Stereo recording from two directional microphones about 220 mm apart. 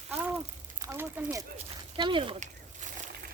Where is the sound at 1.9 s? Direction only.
25° right (ahead or behind).